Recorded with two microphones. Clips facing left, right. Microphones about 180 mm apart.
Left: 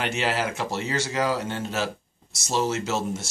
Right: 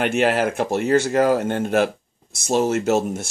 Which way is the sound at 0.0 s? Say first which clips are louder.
Right 7 dB; 55° right (ahead or behind).